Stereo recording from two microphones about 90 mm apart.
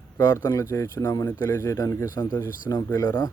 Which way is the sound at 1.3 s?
25° left (ahead or behind).